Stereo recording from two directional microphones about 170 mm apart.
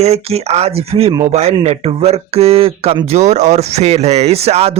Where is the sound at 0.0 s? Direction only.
35° right (ahead or behind).